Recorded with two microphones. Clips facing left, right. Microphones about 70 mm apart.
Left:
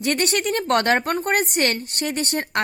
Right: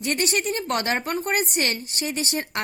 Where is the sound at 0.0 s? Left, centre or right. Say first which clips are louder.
Left 3 dB; left.